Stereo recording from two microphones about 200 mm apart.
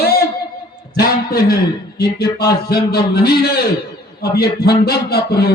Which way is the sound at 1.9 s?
55° left (ahead or behind).